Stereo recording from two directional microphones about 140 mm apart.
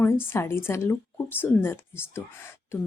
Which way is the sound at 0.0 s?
15° left (ahead or behind).